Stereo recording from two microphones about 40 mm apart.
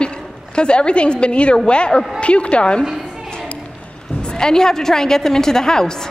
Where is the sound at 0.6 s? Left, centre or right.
Left.